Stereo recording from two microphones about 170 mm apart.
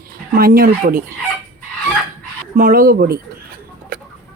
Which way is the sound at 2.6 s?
60° right (ahead or behind).